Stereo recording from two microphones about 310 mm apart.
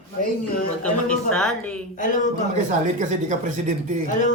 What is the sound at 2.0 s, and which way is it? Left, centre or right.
Speech, left.